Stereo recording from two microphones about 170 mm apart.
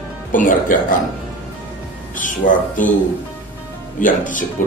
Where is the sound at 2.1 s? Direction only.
50° left (ahead or behind).